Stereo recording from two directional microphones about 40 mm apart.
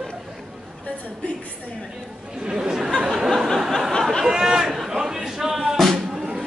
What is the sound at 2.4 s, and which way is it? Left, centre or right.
Chatter, centre.